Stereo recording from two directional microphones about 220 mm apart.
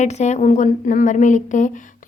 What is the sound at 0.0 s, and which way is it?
A woman's voice, 30° left (ahead or behind).